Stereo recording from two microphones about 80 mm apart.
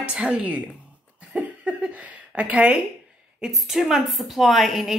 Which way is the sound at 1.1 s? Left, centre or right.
Centre.